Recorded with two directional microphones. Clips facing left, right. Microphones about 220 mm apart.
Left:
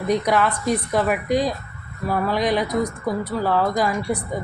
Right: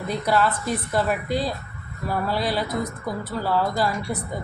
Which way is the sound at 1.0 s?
15° left (ahead or behind).